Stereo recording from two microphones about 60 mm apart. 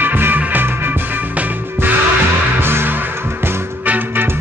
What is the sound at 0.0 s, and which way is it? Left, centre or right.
Music, right.